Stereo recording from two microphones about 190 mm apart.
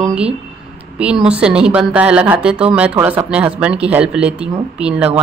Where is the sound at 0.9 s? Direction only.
5° right (ahead or behind).